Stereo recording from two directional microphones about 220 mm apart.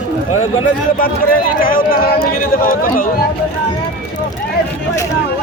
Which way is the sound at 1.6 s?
40° left (ahead or behind).